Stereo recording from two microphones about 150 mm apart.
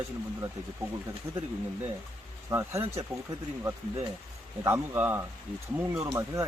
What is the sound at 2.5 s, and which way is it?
Speech, 20° right (ahead or behind).